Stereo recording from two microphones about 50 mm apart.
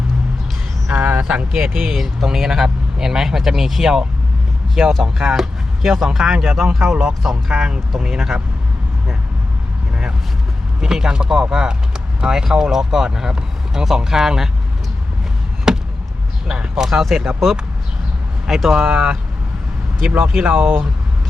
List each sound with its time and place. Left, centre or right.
0.9 s vehicle: right
1.5 s speech: centre
10.8 s speech: centre
15.7 s a sound: centre
16.6 s speech: centre
20.4 s speech: centre